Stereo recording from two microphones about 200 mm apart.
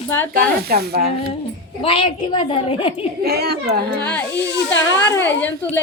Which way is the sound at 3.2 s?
50° right (ahead or behind).